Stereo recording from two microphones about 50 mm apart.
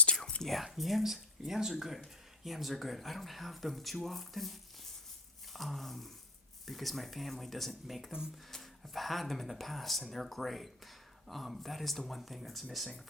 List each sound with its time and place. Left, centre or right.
0.0 s whispering: centre
0.4 s speech: centre
5.5 s speech: centre